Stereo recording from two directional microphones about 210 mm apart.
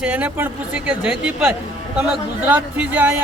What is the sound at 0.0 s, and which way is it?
A man's voice, 5° right (ahead or behind).